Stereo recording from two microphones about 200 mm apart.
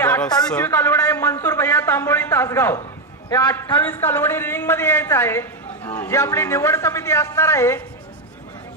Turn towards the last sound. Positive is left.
turn(degrees=15)  # may be behind; listen again after turning